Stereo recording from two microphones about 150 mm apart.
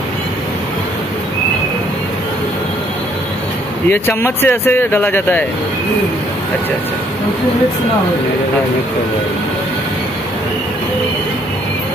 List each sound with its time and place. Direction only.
3.9 s speech: 15° left (ahead or behind)